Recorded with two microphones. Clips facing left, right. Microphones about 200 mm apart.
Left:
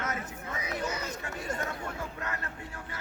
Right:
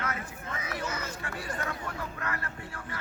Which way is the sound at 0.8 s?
15° left (ahead or behind).